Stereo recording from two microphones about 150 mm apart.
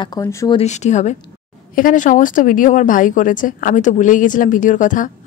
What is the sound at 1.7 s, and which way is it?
A woman's voice, 60° left (ahead or behind).